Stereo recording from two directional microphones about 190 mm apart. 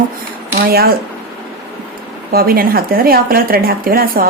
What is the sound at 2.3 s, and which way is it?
Speech, 50° right (ahead or behind).